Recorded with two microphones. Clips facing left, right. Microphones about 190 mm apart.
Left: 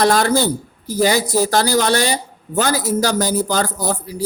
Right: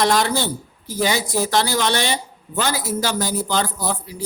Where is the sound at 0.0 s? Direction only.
45° left (ahead or behind).